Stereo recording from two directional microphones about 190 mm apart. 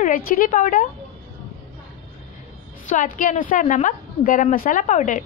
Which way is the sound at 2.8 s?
45° left (ahead or behind).